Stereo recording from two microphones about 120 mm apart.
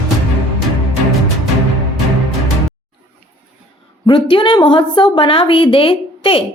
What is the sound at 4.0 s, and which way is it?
Speech, 45° left (ahead or behind).